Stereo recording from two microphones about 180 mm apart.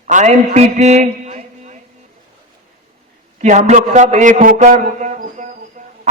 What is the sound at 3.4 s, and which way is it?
A man's voice, 40° right (ahead or behind).